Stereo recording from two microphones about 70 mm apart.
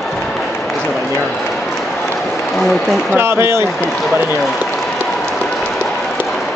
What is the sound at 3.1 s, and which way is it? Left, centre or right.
Speech, right.